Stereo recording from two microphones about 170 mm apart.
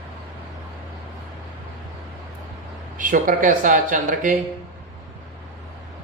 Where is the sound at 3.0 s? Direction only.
50° right (ahead or behind).